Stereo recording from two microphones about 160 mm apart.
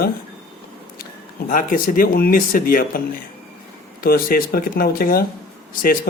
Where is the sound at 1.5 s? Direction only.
55° left (ahead or behind).